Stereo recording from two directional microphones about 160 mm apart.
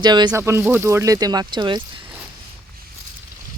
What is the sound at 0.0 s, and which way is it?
Speech, 25° right (ahead or behind).